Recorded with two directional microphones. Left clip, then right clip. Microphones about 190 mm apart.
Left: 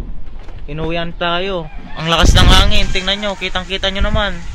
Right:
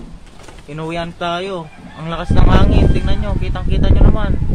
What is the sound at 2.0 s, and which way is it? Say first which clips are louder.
Speech: left 11 dB; 20° left (ahead or behind).